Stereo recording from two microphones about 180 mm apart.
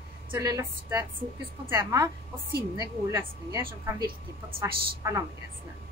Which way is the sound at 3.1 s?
15° right (ahead or behind).